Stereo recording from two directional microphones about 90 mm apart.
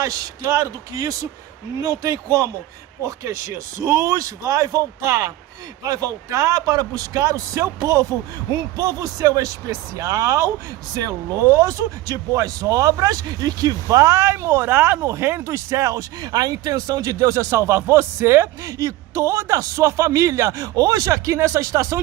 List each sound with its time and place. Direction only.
0.0 s speech: 40° right (ahead or behind)
13.8 s speech: 35° right (ahead or behind)